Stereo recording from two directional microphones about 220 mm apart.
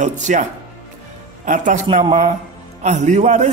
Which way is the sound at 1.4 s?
35° right (ahead or behind).